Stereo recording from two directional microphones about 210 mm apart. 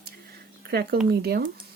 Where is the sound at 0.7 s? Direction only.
50° right (ahead or behind).